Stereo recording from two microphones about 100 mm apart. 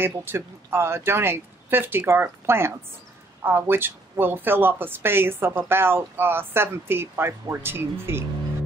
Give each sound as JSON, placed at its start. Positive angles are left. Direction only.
{"t": 0.0, "sound": "speech", "side_deg": -20}